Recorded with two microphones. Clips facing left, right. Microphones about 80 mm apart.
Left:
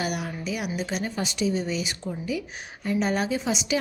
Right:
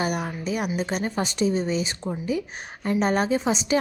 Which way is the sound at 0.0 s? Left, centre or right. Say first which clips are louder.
Right 3 dB; right.